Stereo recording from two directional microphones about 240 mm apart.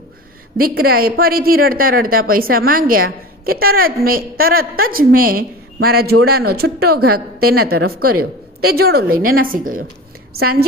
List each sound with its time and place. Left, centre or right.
0.5 s a man's voice: right
7.5 s a woman's voice: right
8.2 s a man's voice: right